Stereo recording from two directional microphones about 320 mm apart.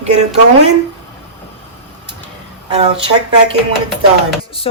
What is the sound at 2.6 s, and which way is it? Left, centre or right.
Speech, centre.